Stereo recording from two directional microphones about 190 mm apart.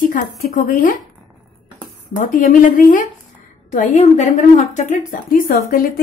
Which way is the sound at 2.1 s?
45° left (ahead or behind).